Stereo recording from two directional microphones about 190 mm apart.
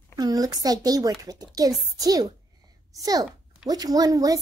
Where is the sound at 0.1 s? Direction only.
20° right (ahead or behind).